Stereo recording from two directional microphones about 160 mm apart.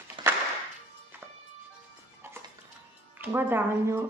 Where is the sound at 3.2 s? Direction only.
15° right (ahead or behind).